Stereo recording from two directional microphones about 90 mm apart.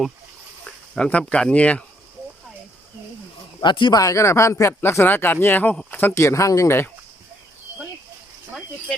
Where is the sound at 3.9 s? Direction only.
35° left (ahead or behind).